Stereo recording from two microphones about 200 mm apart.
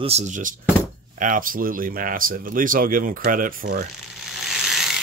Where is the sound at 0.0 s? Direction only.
35° right (ahead or behind).